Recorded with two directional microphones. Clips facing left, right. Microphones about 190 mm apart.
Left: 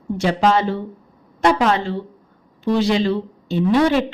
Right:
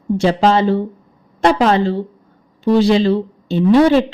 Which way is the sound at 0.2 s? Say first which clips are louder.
Right 3 dB; 30° right (ahead or behind).